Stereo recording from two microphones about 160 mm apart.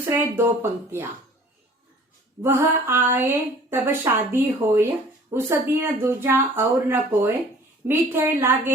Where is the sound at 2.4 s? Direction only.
15° right (ahead or behind).